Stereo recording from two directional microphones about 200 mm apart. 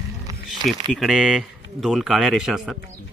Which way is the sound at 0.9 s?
Centre (ahead or behind).